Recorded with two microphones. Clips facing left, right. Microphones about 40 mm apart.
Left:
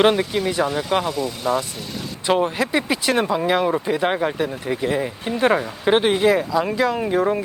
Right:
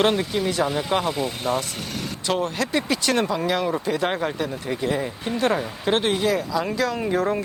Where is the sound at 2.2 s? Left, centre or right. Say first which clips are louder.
Left 5 dB; centre.